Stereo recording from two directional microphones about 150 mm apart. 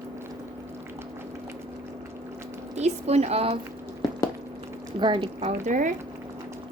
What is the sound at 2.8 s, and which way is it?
Speech, 45° right (ahead or behind).